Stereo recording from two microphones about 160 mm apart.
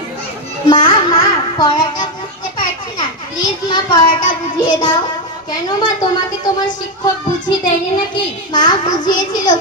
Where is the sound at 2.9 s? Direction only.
25° left (ahead or behind).